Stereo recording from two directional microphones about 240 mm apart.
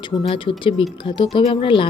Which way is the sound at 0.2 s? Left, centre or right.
Left.